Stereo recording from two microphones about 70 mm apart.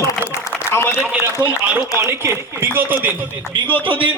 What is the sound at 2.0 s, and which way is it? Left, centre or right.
Speech, right.